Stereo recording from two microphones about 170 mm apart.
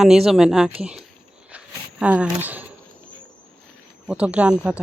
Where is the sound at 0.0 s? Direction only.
Centre (ahead or behind).